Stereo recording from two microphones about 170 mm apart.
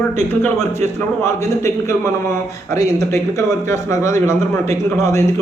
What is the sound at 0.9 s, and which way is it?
A man's voice, 15° left (ahead or behind).